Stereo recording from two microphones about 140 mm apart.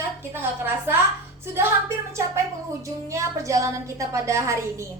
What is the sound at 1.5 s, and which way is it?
Music, 15° right (ahead or behind).